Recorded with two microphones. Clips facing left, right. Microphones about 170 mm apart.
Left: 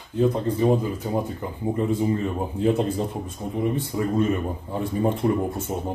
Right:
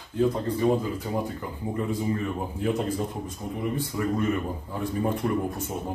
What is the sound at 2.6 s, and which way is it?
Speech, 25° left (ahead or behind).